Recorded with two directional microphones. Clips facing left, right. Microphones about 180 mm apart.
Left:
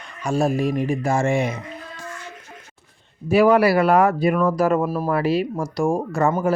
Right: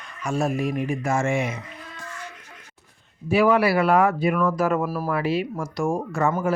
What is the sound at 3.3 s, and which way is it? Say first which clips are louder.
Speech: left 4 dB; 40° left (ahead or behind).